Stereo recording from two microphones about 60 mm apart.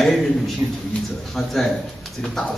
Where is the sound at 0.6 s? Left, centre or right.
Right.